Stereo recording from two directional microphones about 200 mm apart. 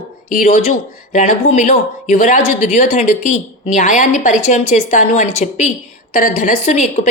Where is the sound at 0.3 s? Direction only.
35° left (ahead or behind).